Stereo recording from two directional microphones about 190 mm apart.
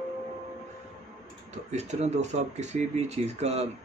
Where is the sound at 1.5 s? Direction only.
35° right (ahead or behind).